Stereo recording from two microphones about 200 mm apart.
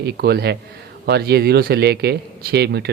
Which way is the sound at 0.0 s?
55° right (ahead or behind).